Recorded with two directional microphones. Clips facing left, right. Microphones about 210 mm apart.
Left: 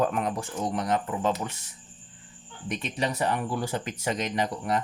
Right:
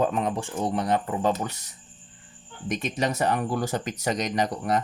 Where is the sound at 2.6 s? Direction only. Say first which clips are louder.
Right 3 dB; 45° right (ahead or behind).